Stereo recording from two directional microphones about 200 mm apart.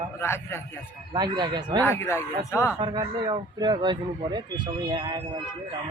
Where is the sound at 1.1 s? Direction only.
20° right (ahead or behind).